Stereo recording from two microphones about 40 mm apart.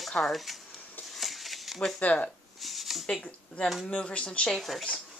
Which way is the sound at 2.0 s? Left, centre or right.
Left.